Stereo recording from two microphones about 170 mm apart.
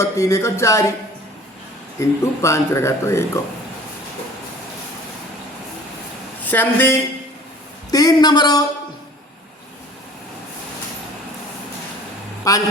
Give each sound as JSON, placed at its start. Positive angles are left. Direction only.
{"t": 0.0, "sound": "speech", "side_deg": 20}
{"t": 2.0, "sound": "speech", "side_deg": 15}
{"t": 6.4, "sound": "a woman's voice", "side_deg": 10}
{"t": 7.9, "sound": "speech", "side_deg": 20}
{"t": 12.5, "sound": "speech", "side_deg": 20}